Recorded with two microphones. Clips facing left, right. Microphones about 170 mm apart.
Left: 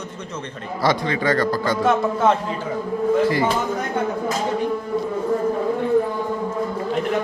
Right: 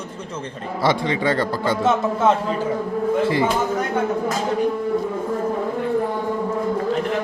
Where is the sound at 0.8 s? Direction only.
25° right (ahead or behind).